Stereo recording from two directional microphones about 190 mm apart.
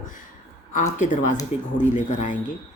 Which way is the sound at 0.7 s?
45° left (ahead or behind).